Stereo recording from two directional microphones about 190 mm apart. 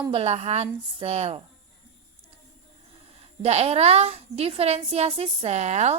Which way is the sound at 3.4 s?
35° right (ahead or behind).